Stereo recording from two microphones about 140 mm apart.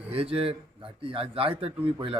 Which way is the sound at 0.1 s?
45° right (ahead or behind).